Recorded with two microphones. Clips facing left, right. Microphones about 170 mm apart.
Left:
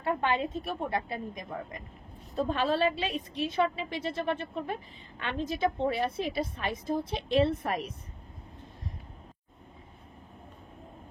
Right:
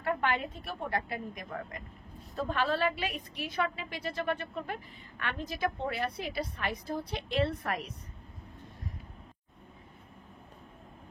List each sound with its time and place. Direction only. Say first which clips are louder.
0.0 s a woman's voice: left 2 dB; 20° left (ahead or behind)